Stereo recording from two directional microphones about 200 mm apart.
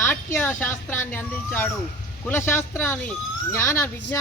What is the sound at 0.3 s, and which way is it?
Speech, 10° left (ahead or behind).